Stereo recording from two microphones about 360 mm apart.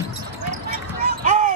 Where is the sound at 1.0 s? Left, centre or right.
Right.